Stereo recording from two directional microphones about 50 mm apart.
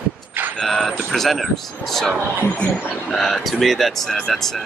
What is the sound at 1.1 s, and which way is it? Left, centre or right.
Speech, centre.